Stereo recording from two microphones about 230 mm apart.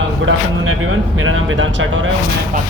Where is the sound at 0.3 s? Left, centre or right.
Right.